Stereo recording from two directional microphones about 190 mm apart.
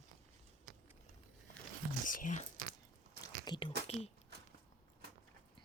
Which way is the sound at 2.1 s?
45° left (ahead or behind).